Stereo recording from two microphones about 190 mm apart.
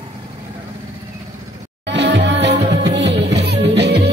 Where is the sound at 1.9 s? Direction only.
65° right (ahead or behind).